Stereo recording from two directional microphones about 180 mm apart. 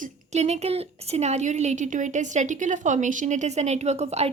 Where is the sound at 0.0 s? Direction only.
40° right (ahead or behind).